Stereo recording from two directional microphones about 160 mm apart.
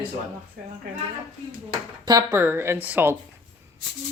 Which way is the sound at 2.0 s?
25° right (ahead or behind).